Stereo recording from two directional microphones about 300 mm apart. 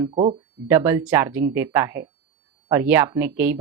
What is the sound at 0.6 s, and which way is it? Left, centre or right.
A woman's voice, centre.